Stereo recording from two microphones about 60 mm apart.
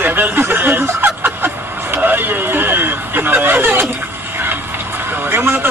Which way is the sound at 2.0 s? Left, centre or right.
Right.